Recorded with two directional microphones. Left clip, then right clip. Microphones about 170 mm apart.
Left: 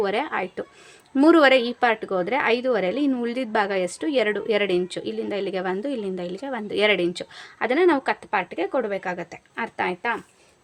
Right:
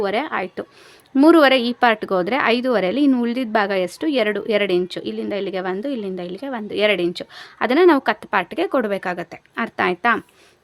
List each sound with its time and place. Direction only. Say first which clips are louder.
0.0 s a woman's voice: right 3 dB; 20° right (ahead or behind); by 10.2 s 50° right (ahead or behind)